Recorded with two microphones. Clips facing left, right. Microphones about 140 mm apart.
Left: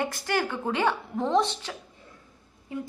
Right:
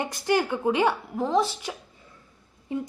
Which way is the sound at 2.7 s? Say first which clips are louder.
Right 4 dB; 20° right (ahead or behind).